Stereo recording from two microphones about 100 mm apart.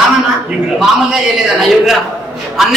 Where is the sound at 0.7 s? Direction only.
Centre (ahead or behind).